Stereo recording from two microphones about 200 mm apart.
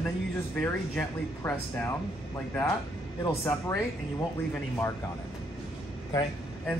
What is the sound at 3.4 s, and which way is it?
Speech, 15° left (ahead or behind).